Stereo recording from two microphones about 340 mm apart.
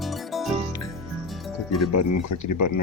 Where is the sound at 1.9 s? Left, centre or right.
Left.